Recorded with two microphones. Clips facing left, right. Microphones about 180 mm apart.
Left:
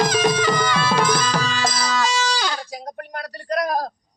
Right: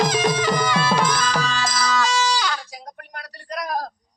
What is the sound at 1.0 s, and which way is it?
Music, 10° left (ahead or behind).